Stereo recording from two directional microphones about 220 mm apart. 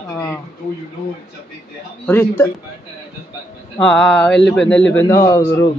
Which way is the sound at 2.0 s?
10° left (ahead or behind).